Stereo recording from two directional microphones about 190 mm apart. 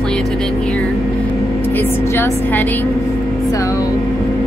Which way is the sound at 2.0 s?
15° left (ahead or behind).